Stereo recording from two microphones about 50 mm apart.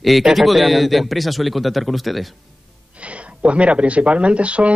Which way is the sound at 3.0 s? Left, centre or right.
Right.